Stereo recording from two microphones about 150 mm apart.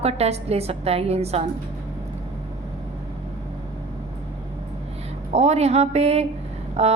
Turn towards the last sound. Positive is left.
turn(degrees=-45)  # may be behind; listen again after turning